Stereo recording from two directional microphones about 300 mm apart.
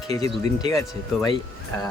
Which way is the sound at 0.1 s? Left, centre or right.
Right.